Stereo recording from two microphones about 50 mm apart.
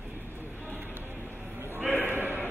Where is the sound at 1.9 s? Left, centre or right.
Right.